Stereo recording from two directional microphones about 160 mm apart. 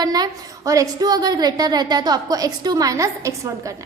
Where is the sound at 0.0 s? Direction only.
25° right (ahead or behind).